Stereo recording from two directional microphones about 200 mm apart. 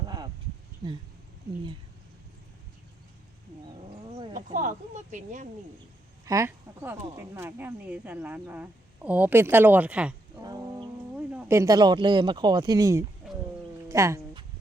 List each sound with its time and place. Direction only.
4.4 s speech: 40° right (ahead or behind)
6.2 s speech: 15° right (ahead or behind)
10.4 s music: 20° right (ahead or behind)
11.3 s speech: 10° right (ahead or behind)
13.8 s a sound: 15° right (ahead or behind)